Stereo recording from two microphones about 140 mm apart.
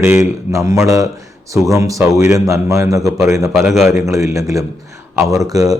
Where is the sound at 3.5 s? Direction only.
Centre (ahead or behind).